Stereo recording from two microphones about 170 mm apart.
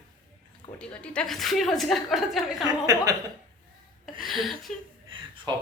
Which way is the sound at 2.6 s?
20° right (ahead or behind).